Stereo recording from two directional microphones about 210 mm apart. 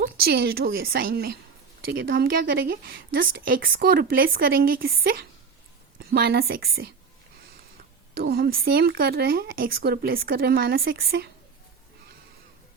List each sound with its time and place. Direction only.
0.0 s speech: 50° right (ahead or behind)
8.1 s speech: 45° right (ahead or behind)